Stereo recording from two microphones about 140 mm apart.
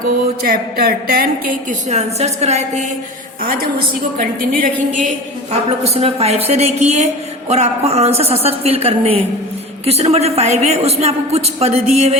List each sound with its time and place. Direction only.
0.4 s a woman's voice: 90° right
1.9 s a woman's voice: 50° right (ahead or behind)
3.4 s a woman's voice: 90° right
5.5 s a woman's voice: 45° right (ahead or behind)